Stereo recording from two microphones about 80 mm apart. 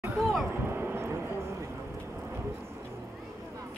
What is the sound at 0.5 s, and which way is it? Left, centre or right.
Vehicle, right.